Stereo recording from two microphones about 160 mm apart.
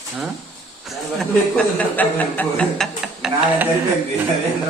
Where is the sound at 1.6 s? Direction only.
10° left (ahead or behind).